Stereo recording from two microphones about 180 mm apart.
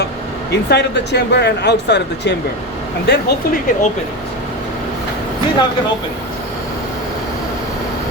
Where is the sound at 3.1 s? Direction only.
60° left (ahead or behind).